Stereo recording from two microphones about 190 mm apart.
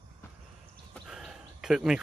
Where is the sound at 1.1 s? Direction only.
5° right (ahead or behind).